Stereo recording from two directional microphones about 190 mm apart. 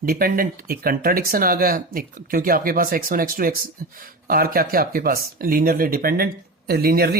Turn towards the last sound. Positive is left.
turn(degrees=-55)  # may be behind; listen again after turning